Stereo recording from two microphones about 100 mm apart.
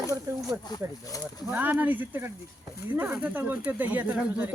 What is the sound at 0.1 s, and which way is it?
Snake, 35° right (ahead or behind).